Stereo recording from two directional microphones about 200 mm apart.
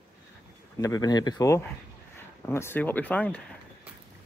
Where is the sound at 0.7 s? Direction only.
15° left (ahead or behind).